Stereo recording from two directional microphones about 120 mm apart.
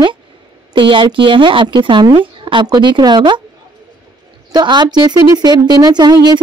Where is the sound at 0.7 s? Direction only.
45° right (ahead or behind).